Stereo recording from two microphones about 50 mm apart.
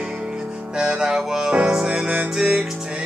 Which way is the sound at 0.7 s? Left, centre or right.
Centre.